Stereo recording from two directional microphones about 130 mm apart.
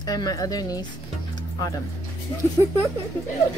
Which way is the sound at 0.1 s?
30° left (ahead or behind).